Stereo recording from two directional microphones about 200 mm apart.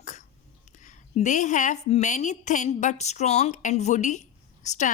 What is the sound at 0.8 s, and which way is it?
A woman's voice, 40° left (ahead or behind).